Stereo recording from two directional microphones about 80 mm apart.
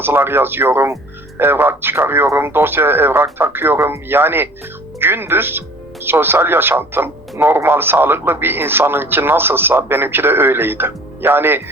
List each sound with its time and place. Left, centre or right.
0.0 s speech: right